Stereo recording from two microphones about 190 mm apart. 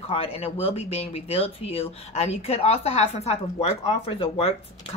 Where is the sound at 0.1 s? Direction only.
30° left (ahead or behind).